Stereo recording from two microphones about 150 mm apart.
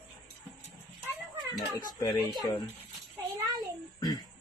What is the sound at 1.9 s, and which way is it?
Speech, 25° left (ahead or behind).